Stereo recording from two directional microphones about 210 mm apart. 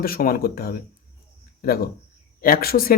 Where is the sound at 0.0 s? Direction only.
45° left (ahead or behind).